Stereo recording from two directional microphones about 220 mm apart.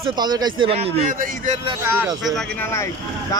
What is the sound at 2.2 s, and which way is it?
Speech, centre (ahead or behind).